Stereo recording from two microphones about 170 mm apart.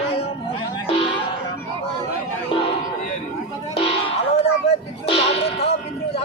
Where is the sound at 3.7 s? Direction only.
35° left (ahead or behind).